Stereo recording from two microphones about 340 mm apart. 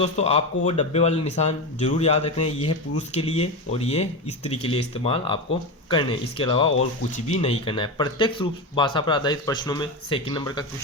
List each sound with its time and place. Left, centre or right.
0.0 s speech: centre